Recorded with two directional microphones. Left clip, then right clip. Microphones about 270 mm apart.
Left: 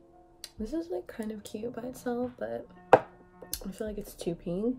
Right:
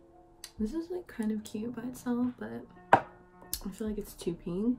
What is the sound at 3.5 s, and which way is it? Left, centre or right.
Speech, centre.